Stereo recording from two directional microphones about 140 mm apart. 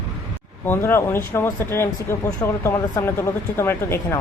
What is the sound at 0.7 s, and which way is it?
Speech, 15° left (ahead or behind).